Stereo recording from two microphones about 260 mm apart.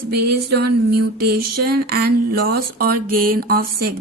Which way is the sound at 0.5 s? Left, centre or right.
Right.